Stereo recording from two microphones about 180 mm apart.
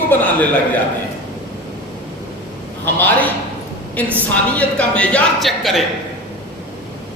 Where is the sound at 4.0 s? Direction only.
10° left (ahead or behind).